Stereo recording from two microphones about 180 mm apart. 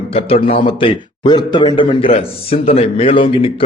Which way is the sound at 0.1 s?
30° left (ahead or behind).